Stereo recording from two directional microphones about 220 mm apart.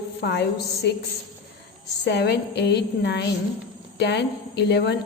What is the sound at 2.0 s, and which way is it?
A woman's voice, 50° left (ahead or behind).